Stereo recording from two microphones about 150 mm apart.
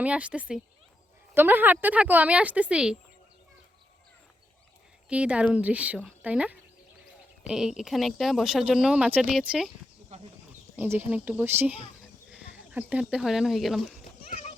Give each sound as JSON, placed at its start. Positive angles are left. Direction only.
{"t": 0.0, "sound": "speech", "side_deg": -10}
{"t": 5.0, "sound": "speech", "side_deg": -10}
{"t": 10.1, "sound": "a sound", "side_deg": -45}
{"t": 10.8, "sound": "speech", "side_deg": -15}
{"t": 14.3, "sound": "children playing", "side_deg": 45}